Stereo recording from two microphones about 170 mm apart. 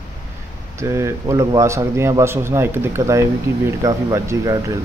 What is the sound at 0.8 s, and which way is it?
A man's voice, 15° right (ahead or behind).